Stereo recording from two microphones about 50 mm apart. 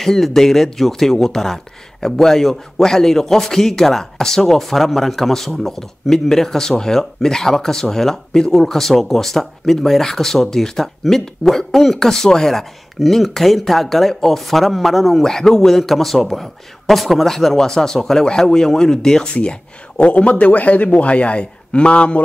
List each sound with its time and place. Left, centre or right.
0.0 s speech: centre
15.2 s speech: centre
20.0 s a man's voice: left